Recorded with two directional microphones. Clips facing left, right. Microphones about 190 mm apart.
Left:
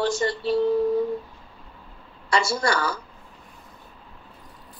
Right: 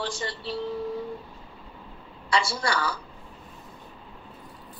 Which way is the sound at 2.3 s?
45° left (ahead or behind).